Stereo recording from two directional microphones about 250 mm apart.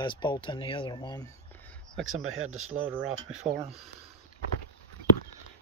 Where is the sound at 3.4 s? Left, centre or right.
Right.